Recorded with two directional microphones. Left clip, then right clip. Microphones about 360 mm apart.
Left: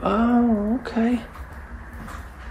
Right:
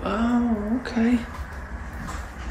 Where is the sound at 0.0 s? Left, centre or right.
Centre.